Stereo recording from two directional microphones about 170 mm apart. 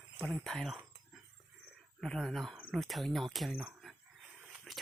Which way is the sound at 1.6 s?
Centre (ahead or behind).